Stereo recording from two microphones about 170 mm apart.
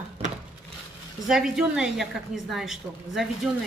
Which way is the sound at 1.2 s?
Centre (ahead or behind).